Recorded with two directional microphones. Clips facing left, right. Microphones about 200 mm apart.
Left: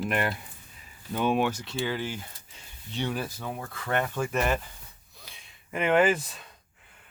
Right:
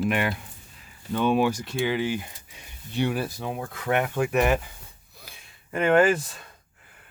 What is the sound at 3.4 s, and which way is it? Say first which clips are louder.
Speech: right 4 dB; 20° right (ahead or behind).